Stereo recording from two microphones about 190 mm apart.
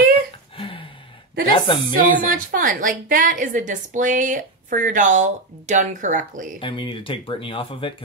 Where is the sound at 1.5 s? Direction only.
25° left (ahead or behind).